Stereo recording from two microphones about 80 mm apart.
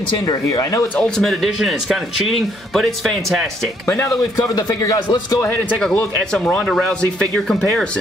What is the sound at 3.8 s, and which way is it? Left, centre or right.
Speech, left.